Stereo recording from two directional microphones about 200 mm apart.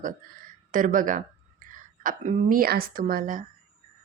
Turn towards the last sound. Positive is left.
turn(degrees=-45)  # may be behind; listen again after turning